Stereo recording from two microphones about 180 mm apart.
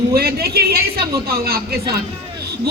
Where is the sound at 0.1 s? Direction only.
60° right (ahead or behind).